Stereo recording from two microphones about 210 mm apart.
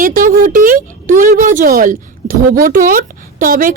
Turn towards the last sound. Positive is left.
turn(degrees=-40)  # may be behind; listen again after turning